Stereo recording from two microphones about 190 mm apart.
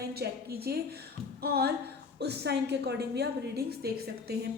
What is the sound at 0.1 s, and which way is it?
A woman's voice, 55° right (ahead or behind).